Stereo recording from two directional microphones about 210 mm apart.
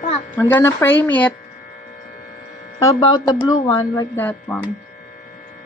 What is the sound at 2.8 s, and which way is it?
Speech, 15° left (ahead or behind).